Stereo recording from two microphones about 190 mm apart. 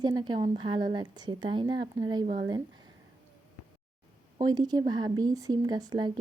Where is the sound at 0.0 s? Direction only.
20° right (ahead or behind).